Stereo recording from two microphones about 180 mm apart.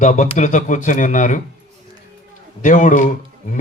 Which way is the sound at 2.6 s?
45° left (ahead or behind).